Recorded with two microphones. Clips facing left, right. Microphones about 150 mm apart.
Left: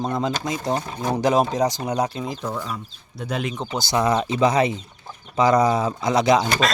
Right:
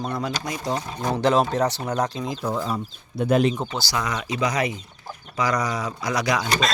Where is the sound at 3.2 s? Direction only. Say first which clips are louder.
Right 8 dB; 50° right (ahead or behind).